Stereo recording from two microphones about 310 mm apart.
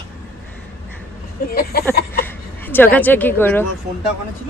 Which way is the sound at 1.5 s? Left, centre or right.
Left.